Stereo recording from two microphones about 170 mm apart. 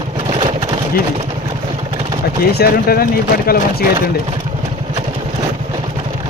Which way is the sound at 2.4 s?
65° left (ahead or behind).